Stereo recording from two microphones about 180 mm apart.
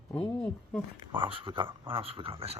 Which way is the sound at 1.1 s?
30° right (ahead or behind).